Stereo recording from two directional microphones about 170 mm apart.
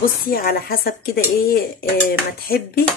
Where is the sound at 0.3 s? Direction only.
65° left (ahead or behind).